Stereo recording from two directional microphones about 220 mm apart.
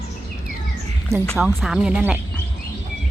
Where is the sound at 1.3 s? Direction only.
Centre (ahead or behind).